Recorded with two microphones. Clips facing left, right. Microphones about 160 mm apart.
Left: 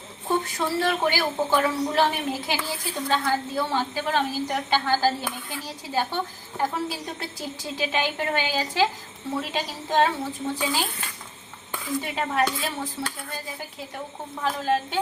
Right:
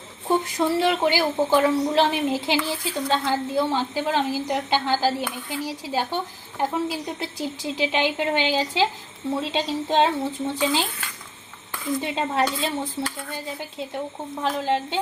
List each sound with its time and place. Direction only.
0.5 s speech: 15° right (ahead or behind)
11.9 s speech: 20° right (ahead or behind)